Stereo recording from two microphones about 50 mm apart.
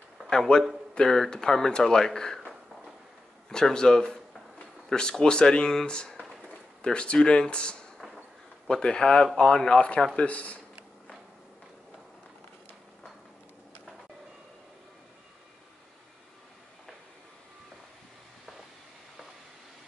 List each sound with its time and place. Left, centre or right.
0.3 s speech: centre
3.4 s speech: centre; by 10.6 s left